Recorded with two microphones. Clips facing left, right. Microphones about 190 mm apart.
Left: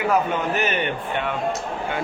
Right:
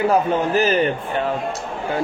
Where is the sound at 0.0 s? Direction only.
35° right (ahead or behind).